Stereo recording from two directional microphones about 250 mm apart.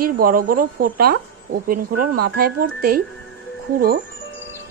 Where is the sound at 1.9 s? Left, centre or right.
Right.